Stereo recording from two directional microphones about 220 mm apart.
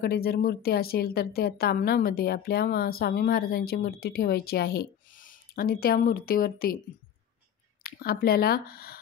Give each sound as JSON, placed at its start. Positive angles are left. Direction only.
{"t": 0.0, "sound": "a woman's voice", "side_deg": 45}
{"t": 7.8, "sound": "a woman's voice", "side_deg": 45}